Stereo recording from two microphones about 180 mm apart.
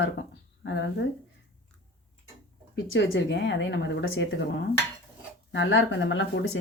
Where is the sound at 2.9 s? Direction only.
85° left.